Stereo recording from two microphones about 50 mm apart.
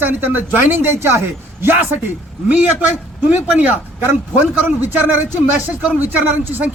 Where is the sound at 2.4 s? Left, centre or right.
Right.